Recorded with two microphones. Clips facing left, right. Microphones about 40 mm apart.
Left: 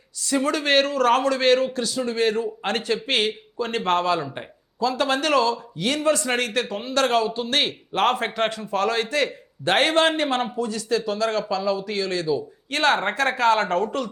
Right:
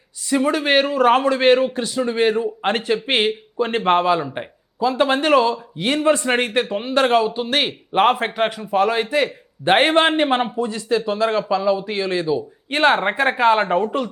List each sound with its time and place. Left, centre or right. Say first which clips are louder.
0.2 s a man's voice: right 4 dB; centre